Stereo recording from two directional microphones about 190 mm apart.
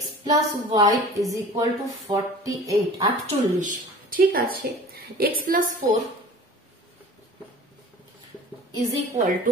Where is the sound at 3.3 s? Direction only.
40° right (ahead or behind).